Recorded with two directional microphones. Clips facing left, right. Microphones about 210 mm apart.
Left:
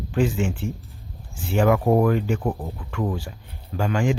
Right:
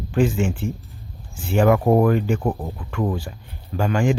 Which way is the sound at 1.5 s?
45° right (ahead or behind).